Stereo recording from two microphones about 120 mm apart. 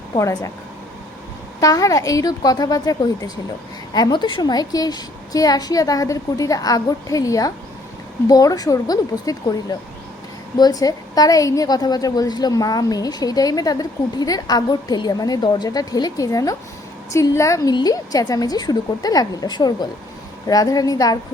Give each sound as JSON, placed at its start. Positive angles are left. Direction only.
{"t": 0.2, "sound": "a woman's voice", "side_deg": 25}
{"t": 1.6, "sound": "a woman's voice", "side_deg": 30}